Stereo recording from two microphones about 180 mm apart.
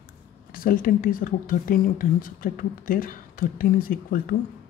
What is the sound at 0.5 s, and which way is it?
A woman's voice, 50° left (ahead or behind).